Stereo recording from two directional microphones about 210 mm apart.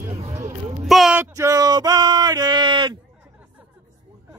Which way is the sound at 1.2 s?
15° right (ahead or behind).